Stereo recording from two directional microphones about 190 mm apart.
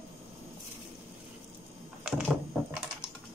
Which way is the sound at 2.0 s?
5° right (ahead or behind).